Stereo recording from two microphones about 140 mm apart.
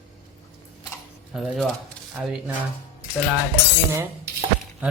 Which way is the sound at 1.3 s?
5° right (ahead or behind).